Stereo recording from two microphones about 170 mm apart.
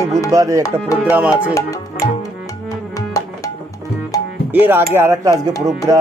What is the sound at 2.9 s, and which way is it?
Music, 20° left (ahead or behind).